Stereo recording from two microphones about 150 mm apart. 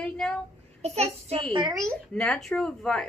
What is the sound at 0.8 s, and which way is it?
Speech, 45° right (ahead or behind).